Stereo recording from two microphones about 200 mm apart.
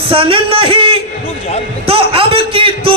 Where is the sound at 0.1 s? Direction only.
25° right (ahead or behind).